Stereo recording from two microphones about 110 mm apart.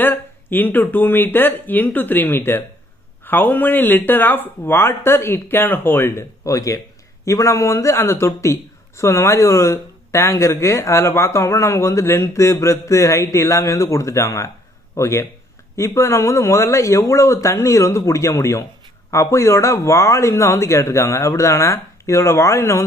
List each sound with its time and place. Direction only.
0.0 s a man's voice: 20° left (ahead or behind)